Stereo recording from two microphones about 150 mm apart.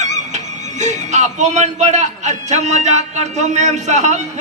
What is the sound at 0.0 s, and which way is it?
Speech, 50° right (ahead or behind).